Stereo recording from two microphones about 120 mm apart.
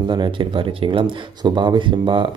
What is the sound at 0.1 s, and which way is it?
A man's voice, 40° right (ahead or behind).